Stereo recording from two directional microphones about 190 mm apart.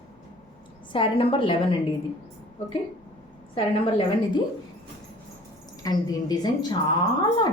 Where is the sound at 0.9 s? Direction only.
30° left (ahead or behind).